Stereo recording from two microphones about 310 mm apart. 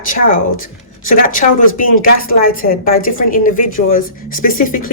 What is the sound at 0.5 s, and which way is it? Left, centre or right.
Speech, left.